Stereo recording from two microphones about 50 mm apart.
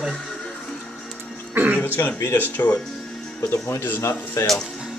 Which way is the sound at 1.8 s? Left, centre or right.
Left.